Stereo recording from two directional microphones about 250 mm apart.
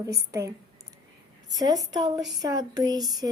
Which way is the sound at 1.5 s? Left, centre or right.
Centre.